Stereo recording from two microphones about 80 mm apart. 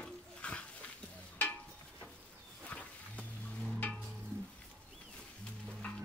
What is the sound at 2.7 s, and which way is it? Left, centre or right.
Wild animals, centre.